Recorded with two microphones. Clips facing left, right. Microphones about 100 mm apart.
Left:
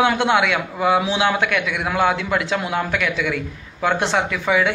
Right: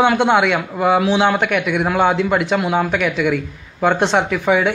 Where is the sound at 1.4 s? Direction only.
20° right (ahead or behind).